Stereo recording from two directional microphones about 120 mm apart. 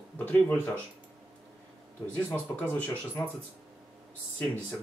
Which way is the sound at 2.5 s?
10° left (ahead or behind).